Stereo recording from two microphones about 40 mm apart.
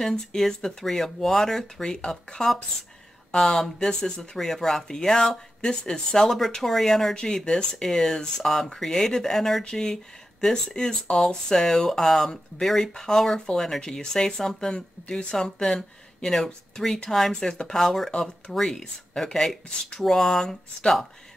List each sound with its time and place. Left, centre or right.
0.0 s speech: centre
9.7 s speech: centre